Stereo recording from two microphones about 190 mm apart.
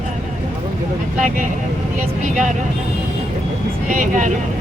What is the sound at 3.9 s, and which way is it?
Speech, 45° right (ahead or behind).